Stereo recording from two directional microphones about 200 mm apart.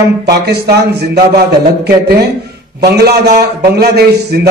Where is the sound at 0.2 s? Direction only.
55° right (ahead or behind).